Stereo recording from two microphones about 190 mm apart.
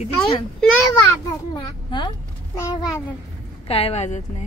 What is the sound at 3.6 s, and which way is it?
Speech, 30° left (ahead or behind).